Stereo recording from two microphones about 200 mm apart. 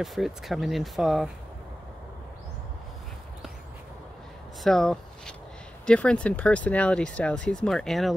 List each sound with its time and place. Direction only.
0.0 s speech: centre (ahead or behind)
4.6 s speech: 5° left (ahead or behind)